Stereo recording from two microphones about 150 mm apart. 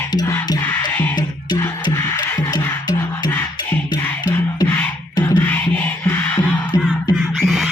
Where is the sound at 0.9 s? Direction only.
15° left (ahead or behind).